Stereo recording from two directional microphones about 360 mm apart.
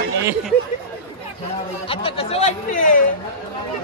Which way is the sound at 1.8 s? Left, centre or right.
Centre.